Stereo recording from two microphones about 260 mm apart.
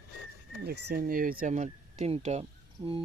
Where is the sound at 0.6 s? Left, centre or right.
Right.